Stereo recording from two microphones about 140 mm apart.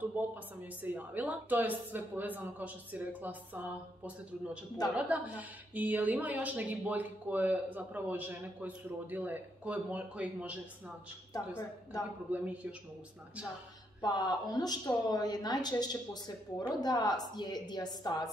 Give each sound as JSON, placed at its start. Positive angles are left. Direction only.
{"t": 0.0, "sound": "a sound", "side_deg": -15}
{"t": 0.8, "sound": "speech", "side_deg": -10}
{"t": 11.3, "sound": "a woman's voice", "side_deg": 25}
{"t": 12.3, "sound": "speech", "side_deg": -10}
{"t": 14.0, "sound": "a woman's voice", "side_deg": 30}